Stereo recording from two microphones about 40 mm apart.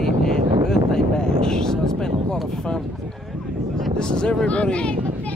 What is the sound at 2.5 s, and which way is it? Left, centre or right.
Speech, centre.